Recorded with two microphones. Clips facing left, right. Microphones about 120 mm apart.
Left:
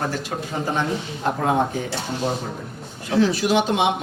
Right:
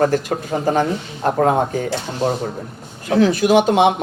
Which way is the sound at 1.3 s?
50° right (ahead or behind).